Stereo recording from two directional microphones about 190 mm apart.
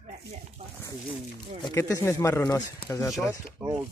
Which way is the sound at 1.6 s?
15° left (ahead or behind).